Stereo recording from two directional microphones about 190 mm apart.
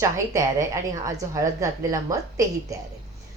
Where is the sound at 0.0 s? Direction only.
15° right (ahead or behind).